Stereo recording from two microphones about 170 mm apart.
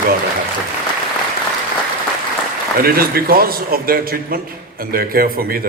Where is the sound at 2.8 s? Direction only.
60° right (ahead or behind).